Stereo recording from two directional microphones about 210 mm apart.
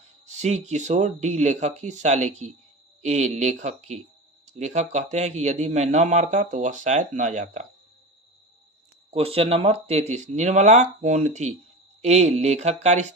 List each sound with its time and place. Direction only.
0.3 s speech: 35° right (ahead or behind)
9.0 s speech: 30° right (ahead or behind)